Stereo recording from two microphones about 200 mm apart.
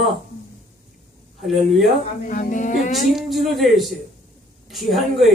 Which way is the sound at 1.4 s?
Centre (ahead or behind).